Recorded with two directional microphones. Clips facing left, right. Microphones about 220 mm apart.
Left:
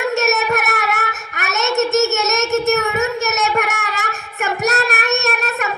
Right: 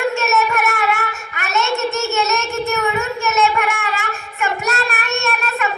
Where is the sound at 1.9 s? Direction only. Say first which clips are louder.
Left 3 dB; 40° left (ahead or behind).